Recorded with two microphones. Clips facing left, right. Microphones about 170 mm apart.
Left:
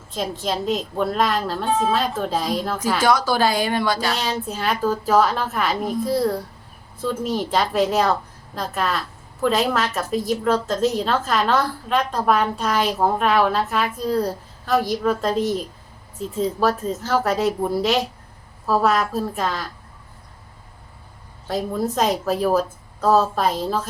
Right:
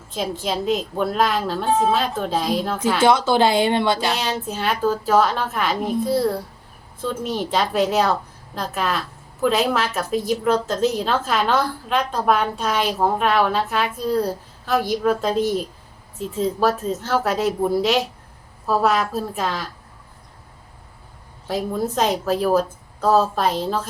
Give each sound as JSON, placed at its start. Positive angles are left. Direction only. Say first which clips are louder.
{"t": 0.1, "sound": "a woman's voice", "louder": "even", "side_deg": 0}
{"t": 3.0, "sound": "speech", "louder": "right 3 dB", "side_deg": -25}
{"t": 4.2, "sound": "a woman's voice", "louder": "even", "side_deg": 0}
{"t": 21.4, "sound": "a woman's voice", "louder": "even", "side_deg": 0}